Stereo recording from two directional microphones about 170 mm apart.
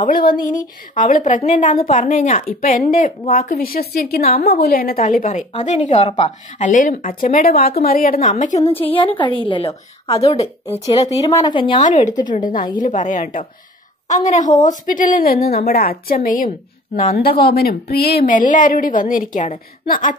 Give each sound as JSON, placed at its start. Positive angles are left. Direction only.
{"t": 0.0, "sound": "a woman's voice", "side_deg": 55}
{"t": 8.9, "sound": "a woman's voice", "side_deg": 30}
{"t": 10.7, "sound": "speech", "side_deg": 20}
{"t": 11.8, "sound": "a woman's voice", "side_deg": 45}
{"t": 16.9, "sound": "a woman's voice", "side_deg": 55}